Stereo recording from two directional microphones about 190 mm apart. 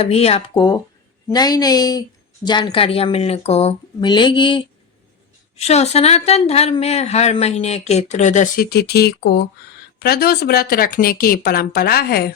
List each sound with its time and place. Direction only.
0.0 s a woman's voice: 35° left (ahead or behind)
8.7 s speech: 55° left (ahead or behind)